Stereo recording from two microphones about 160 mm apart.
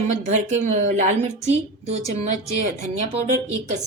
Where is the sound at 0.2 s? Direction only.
45° right (ahead or behind).